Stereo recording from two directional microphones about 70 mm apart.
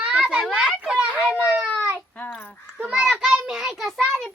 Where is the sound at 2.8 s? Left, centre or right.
Centre.